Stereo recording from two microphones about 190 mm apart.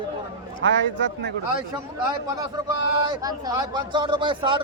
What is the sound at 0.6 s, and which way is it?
Speech, 80° right.